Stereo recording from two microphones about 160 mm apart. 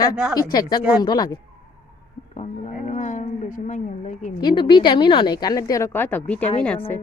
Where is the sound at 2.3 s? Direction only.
50° left (ahead or behind).